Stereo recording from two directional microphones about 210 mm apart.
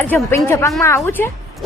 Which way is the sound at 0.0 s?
10° left (ahead or behind).